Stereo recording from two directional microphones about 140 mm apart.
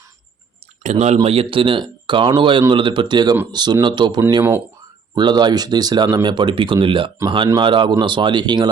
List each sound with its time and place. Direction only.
0.8 s speech: 55° right (ahead or behind); by 8.7 s 30° right (ahead or behind)